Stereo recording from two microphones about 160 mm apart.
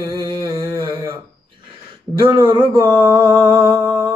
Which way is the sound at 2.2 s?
30° right (ahead or behind).